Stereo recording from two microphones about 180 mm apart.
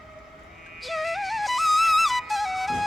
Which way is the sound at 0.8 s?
Centre (ahead or behind).